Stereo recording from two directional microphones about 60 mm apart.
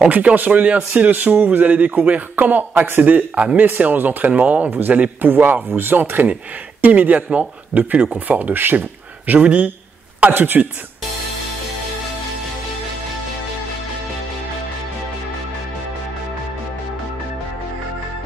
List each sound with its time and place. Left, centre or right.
0.0 s speech: right
3.0 s speech: right
10.3 s a man's voice: right